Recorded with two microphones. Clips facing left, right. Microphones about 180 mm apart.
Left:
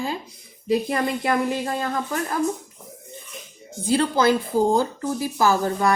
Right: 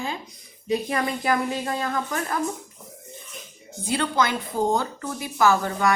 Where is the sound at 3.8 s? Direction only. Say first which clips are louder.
Left 5 dB; 30° left (ahead or behind).